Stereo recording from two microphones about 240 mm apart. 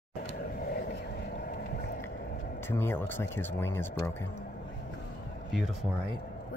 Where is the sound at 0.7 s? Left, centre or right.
Left.